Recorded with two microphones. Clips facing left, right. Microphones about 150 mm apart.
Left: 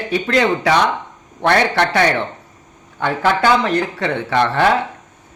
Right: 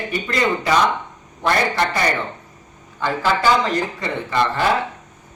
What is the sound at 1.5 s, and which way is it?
A man's voice, 70° left (ahead or behind).